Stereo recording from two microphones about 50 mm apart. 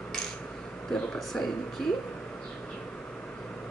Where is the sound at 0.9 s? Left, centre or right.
Centre.